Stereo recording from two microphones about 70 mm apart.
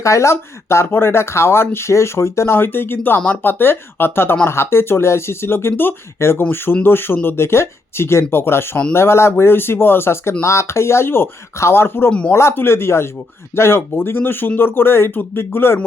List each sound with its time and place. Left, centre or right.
0.0 s speech: left